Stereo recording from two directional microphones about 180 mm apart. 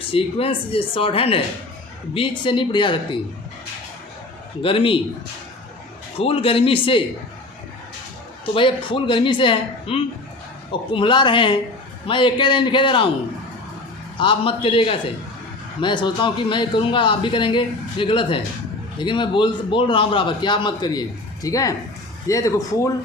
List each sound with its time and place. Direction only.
0.1 s a man's voice: 30° left (ahead or behind)
4.6 s a man's voice: 30° left (ahead or behind)
6.1 s a man's voice: 30° left (ahead or behind)
8.5 s a man's voice: 30° left (ahead or behind)
14.2 s a man's voice: 30° left (ahead or behind)